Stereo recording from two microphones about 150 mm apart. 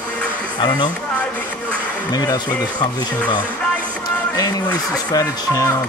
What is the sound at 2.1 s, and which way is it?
Speech, 25° left (ahead or behind).